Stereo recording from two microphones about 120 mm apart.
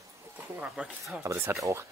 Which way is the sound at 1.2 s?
25° right (ahead or behind).